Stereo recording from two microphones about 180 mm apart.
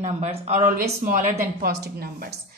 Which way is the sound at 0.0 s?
35° right (ahead or behind).